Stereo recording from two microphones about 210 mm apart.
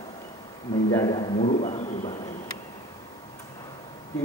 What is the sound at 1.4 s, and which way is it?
Speech, 30° left (ahead or behind).